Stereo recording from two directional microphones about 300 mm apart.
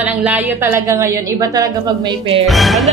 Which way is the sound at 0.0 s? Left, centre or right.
Centre.